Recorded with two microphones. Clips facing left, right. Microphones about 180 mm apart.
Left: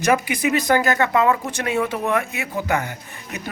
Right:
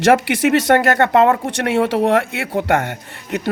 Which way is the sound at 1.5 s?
75° right (ahead or behind).